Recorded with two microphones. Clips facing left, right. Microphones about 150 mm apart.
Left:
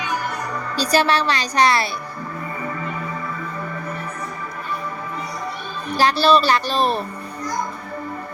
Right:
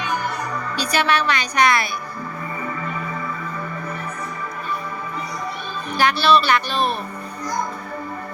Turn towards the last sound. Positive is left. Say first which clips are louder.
# left 2 dB
turn(degrees=35)  # may be behind; listen again after turning